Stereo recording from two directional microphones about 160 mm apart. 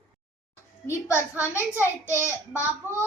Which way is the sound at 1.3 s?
10° right (ahead or behind).